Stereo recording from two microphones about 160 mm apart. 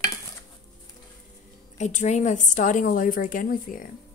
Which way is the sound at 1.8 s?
45° left (ahead or behind).